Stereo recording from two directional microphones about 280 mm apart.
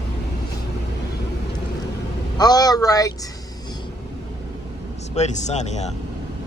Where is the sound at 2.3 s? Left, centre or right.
Centre.